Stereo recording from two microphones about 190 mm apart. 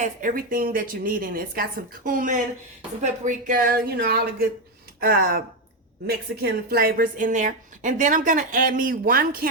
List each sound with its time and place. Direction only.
0.0 s a woman's voice: 45° right (ahead or behind)